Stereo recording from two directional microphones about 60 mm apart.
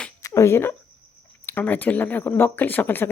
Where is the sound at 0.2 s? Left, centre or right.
Left.